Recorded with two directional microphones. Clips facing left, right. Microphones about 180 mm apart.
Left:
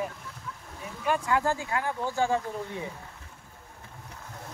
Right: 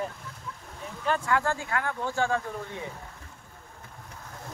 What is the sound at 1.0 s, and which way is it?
Speech, 15° left (ahead or behind).